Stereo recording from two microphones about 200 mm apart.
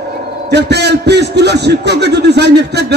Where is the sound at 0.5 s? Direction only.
55° right (ahead or behind).